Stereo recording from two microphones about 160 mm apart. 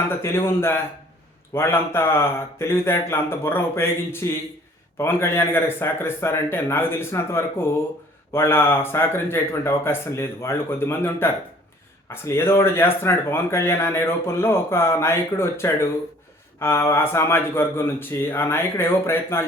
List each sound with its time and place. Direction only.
0.2 s speech: 15° left (ahead or behind)